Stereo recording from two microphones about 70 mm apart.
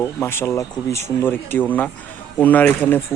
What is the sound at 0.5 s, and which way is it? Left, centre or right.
Speech, left.